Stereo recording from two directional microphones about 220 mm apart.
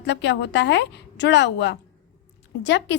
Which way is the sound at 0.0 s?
50° left (ahead or behind).